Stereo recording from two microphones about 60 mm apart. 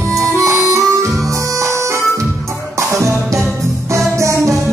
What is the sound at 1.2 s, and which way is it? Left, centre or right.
Music, right.